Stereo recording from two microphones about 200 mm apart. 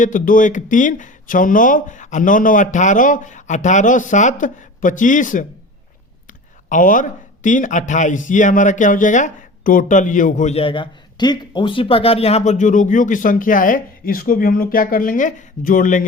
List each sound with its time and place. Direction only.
0.0 s speech: 40° left (ahead or behind)